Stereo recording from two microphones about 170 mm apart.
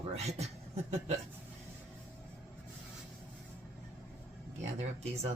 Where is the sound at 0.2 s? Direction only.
40° right (ahead or behind).